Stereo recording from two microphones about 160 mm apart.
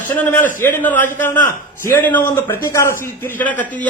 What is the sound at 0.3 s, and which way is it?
Speech, 10° left (ahead or behind).